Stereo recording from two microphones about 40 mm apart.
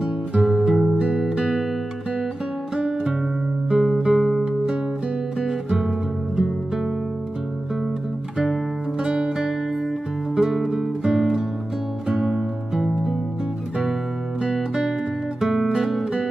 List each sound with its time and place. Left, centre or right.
0.4 s music: centre
0.9 s music: centre
2.7 s music: centre
9.0 s music: centre
14.4 s music: centre